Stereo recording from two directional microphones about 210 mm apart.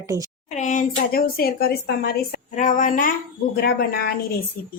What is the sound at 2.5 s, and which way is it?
Speech, 35° left (ahead or behind).